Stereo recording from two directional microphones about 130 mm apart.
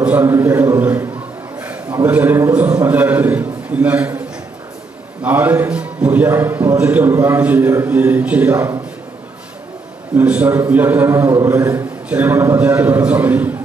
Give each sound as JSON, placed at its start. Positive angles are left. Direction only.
{"t": 0.1, "sound": "a man's voice", "side_deg": -20}
{"t": 2.0, "sound": "a man's voice", "side_deg": -15}
{"t": 5.2, "sound": "a man's voice", "side_deg": -15}
{"t": 10.1, "sound": "a man's voice", "side_deg": -10}